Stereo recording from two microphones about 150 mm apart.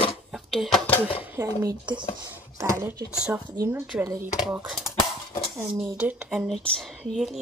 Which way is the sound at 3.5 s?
20° right (ahead or behind).